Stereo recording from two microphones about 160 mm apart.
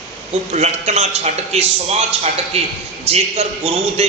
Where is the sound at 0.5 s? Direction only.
45° right (ahead or behind).